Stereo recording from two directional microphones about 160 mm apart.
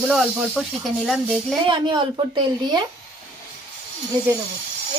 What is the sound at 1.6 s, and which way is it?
A woman's voice, 30° right (ahead or behind).